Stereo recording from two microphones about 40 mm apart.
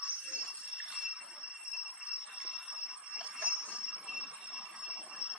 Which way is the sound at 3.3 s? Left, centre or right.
Right.